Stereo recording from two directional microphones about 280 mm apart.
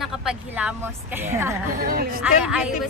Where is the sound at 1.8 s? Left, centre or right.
Right.